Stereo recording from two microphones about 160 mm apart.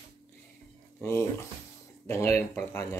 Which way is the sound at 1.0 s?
15° left (ahead or behind).